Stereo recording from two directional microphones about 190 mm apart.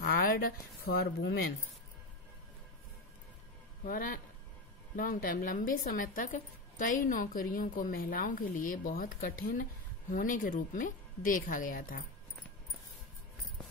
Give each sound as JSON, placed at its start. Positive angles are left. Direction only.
{"t": 0.0, "sound": "speech", "side_deg": 50}
{"t": 3.8, "sound": "speech", "side_deg": 45}